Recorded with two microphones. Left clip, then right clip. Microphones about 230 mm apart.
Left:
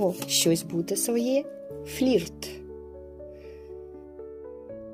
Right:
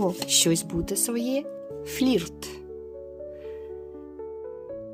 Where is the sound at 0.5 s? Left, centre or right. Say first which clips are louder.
Even; right.